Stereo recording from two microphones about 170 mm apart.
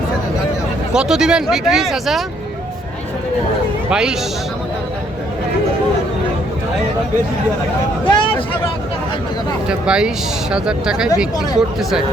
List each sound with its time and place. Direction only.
0.9 s speech: 5° right (ahead or behind)
3.8 s speech: 5° right (ahead or behind)
8.0 s a sound: 30° left (ahead or behind)
9.6 s speech: 5° right (ahead or behind)